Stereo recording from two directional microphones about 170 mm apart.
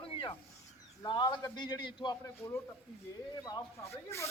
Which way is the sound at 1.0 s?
25° left (ahead or behind).